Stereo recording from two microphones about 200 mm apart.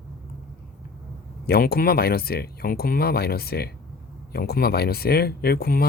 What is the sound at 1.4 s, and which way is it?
A man's voice, 50° left (ahead or behind).